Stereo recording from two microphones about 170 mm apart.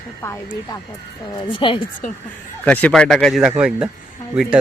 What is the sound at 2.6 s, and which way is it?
Speech, 10° left (ahead or behind).